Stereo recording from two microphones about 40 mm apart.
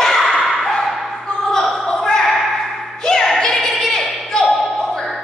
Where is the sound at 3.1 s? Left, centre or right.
Centre.